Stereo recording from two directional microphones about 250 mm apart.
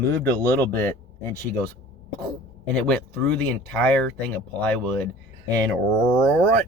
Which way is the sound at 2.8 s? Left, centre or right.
Centre.